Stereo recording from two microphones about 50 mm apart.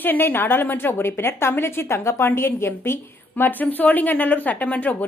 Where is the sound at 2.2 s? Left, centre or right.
Left.